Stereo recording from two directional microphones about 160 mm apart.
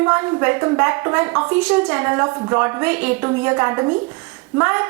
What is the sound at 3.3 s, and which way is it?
A woman's voice, 15° right (ahead or behind).